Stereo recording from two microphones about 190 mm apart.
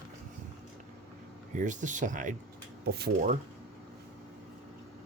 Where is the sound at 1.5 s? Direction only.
40° right (ahead or behind).